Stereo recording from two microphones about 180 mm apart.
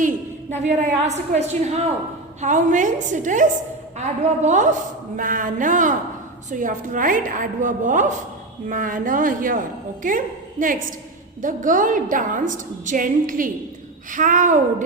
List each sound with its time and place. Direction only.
0.5 s a woman's voice: 40° right (ahead or behind)